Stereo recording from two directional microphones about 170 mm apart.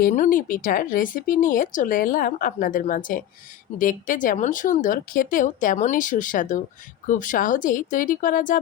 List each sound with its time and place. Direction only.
0.0 s speech: 50° left (ahead or behind)